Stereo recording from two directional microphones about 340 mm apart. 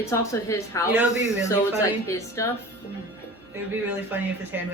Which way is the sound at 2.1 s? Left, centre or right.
Centre.